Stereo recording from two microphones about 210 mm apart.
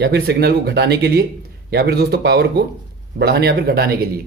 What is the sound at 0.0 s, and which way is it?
A man's voice, 50° right (ahead or behind).